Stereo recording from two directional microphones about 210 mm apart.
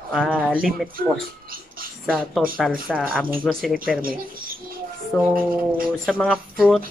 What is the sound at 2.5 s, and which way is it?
A woman's voice, centre (ahead or behind).